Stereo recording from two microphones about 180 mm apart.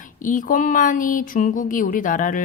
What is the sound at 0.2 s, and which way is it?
Speech, 45° left (ahead or behind).